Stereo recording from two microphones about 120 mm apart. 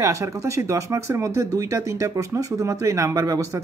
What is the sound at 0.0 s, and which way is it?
Speech, 25° right (ahead or behind).